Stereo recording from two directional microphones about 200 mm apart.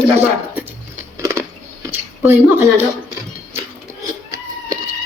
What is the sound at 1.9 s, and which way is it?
Speech, 10° right (ahead or behind).